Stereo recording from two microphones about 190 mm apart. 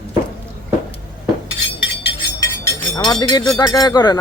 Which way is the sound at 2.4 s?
15° left (ahead or behind).